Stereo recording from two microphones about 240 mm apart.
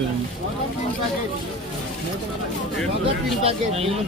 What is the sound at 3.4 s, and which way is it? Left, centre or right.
Speech, right.